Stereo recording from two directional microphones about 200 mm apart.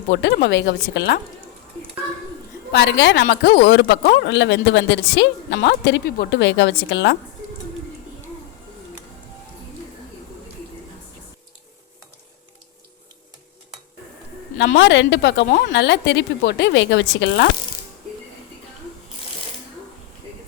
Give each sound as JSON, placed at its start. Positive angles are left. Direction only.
{"t": 0.1, "sound": "a woman's voice", "side_deg": 60}
{"t": 2.7, "sound": "a woman's voice", "side_deg": 60}
{"t": 14.6, "sound": "a woman's voice", "side_deg": 60}